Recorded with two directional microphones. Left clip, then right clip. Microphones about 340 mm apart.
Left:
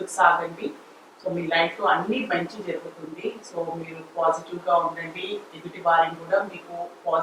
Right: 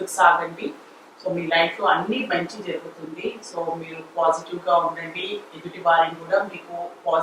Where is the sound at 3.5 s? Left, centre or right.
Left.